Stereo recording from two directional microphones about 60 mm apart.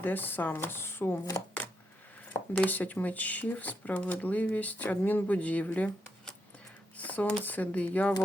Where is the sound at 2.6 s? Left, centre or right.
Left.